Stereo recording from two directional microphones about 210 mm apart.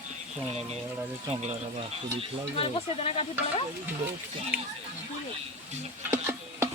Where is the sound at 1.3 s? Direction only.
30° right (ahead or behind).